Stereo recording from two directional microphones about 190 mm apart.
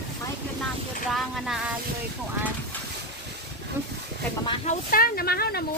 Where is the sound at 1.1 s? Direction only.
Centre (ahead or behind).